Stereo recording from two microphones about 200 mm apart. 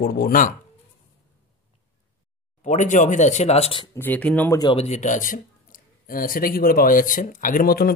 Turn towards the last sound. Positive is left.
turn(degrees=50)  # may be behind; listen again after turning